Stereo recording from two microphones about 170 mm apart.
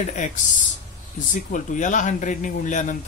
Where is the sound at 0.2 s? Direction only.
45° left (ahead or behind).